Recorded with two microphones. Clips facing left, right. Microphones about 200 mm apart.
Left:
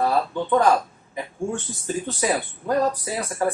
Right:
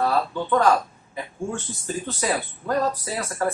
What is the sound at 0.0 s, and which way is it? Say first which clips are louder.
Speech: left 1 dB; 15° left (ahead or behind).